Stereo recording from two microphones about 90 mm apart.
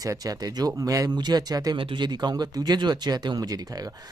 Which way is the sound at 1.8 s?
60° right (ahead or behind).